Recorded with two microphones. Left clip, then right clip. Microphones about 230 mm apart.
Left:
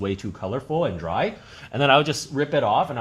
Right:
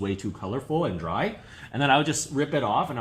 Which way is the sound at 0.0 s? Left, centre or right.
Left.